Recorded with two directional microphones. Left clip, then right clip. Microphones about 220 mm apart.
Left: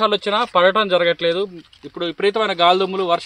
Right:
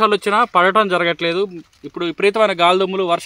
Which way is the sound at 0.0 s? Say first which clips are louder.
Right 3 dB; 55° right (ahead or behind).